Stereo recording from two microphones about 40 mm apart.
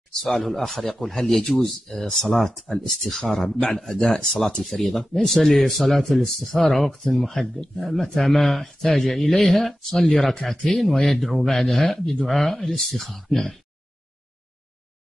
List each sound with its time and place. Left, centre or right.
0.2 s speech: centre